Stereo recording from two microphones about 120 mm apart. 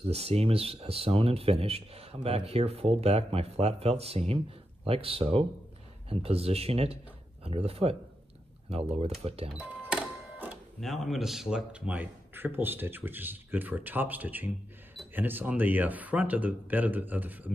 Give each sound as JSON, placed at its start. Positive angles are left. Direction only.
{"t": 0.0, "sound": "speech", "side_deg": -55}
{"t": 9.5, "sound": "speech", "side_deg": -10}